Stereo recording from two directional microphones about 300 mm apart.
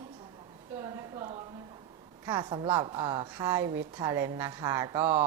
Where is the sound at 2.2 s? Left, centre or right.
Centre.